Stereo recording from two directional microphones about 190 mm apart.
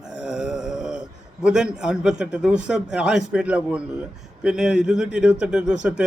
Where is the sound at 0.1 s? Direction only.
5° right (ahead or behind).